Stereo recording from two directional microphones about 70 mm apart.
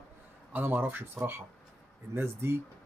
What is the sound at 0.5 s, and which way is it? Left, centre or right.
Speech, right.